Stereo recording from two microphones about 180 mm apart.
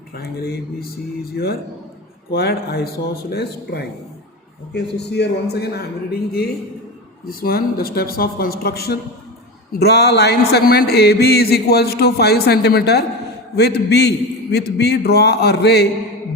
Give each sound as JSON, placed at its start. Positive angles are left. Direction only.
{"t": 0.1, "sound": "a man's voice", "side_deg": 60}
{"t": 7.4, "sound": "speech", "side_deg": 55}